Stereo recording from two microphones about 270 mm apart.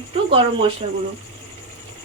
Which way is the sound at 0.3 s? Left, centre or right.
Centre.